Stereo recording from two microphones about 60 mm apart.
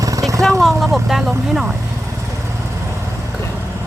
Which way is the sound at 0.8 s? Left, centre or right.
Centre.